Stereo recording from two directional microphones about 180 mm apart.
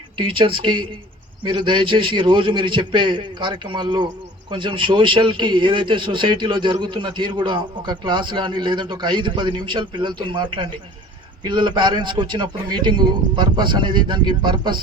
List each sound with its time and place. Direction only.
0.2 s a man's voice: 30° right (ahead or behind)